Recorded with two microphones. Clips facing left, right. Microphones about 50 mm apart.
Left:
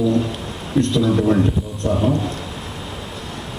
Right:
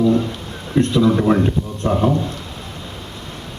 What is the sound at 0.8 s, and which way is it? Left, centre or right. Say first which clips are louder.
A man's voice: right 2 dB; right.